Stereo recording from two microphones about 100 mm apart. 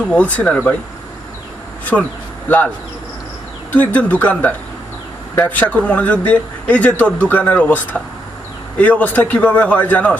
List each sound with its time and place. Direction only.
0.1 s speech: 10° left (ahead or behind)
1.8 s speech: 15° left (ahead or behind)
3.7 s speech: 15° left (ahead or behind)